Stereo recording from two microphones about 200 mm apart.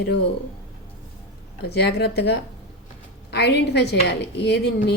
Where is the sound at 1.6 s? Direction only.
55° left (ahead or behind).